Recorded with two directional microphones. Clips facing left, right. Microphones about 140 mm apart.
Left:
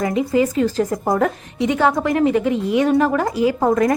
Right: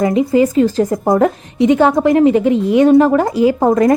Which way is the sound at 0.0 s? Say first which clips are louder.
Right 5 dB; 25° right (ahead or behind).